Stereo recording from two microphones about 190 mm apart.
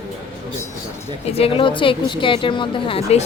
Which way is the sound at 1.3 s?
30° left (ahead or behind).